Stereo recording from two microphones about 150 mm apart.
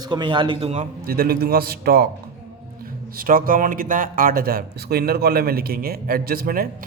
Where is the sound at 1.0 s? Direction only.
90° right.